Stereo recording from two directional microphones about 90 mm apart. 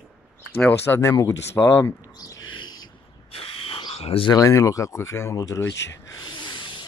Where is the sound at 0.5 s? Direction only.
25° left (ahead or behind).